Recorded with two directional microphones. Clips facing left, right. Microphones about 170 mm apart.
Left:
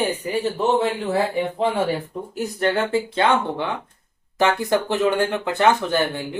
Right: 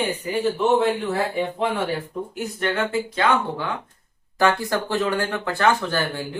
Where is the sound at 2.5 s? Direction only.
35° left (ahead or behind).